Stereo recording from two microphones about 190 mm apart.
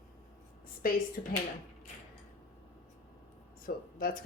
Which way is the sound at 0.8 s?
50° left (ahead or behind).